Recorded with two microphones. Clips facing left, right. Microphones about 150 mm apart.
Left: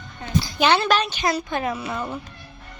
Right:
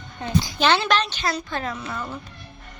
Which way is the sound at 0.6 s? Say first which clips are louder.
Left 2 dB; 5° left (ahead or behind).